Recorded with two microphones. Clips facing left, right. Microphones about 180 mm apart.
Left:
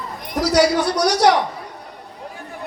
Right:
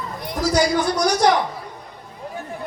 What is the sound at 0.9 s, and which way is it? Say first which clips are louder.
Speech: left 2 dB; 70° left (ahead or behind).